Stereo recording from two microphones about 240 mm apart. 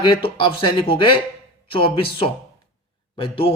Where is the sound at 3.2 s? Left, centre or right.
Left.